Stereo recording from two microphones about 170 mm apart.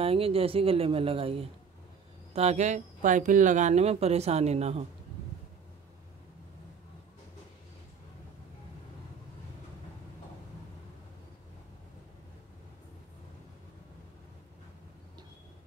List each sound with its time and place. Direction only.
0.0 s speech: 35° right (ahead or behind)